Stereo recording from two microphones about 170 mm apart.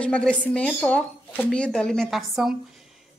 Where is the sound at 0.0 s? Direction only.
5° left (ahead or behind).